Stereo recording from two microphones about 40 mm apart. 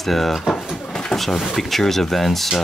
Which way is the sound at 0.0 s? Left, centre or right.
Centre.